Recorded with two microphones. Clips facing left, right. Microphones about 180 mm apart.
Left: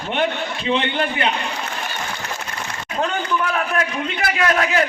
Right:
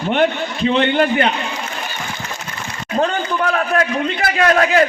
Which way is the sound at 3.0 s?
40° right (ahead or behind).